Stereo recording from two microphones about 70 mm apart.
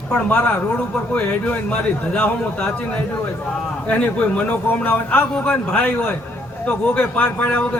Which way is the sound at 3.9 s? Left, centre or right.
Centre.